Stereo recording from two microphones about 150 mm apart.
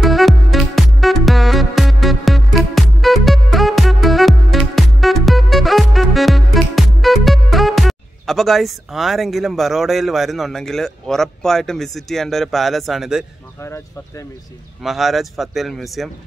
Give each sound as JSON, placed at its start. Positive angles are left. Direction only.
{"t": 0.0, "sound": "music", "side_deg": 0}
{"t": 13.6, "sound": "speech", "side_deg": 20}
{"t": 14.8, "sound": "speech", "side_deg": 0}